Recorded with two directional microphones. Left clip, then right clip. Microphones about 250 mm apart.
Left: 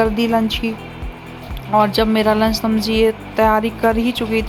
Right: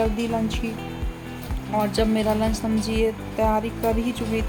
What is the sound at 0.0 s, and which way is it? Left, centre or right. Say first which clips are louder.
Speech: left 8 dB; centre.